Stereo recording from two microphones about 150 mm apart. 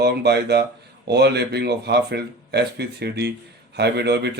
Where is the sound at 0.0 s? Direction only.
90° right.